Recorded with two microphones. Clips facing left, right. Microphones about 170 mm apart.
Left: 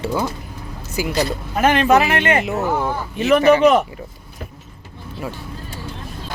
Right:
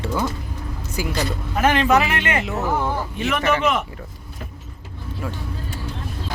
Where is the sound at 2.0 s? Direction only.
40° left (ahead or behind).